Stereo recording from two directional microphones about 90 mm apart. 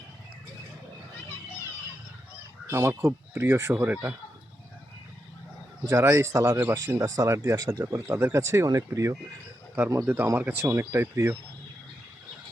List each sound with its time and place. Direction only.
2.6 s speech: 30° right (ahead or behind)
5.8 s speech: 35° right (ahead or behind)